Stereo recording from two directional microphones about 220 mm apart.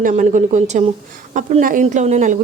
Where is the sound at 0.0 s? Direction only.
35° right (ahead or behind).